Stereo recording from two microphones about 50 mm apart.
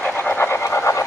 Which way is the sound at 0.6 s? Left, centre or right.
Left.